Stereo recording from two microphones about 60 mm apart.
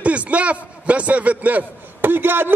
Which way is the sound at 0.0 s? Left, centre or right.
Right.